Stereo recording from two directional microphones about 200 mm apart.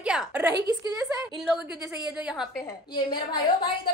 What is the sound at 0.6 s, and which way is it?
Speech, 20° right (ahead or behind).